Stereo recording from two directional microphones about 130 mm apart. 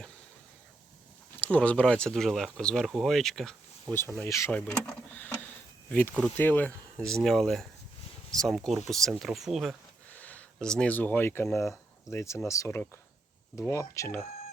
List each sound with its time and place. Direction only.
1.4 s speech: 10° left (ahead or behind)
4.2 s speech: 20° left (ahead or behind)
7.0 s speech: 5° left (ahead or behind)
10.1 s speech: 10° left (ahead or behind)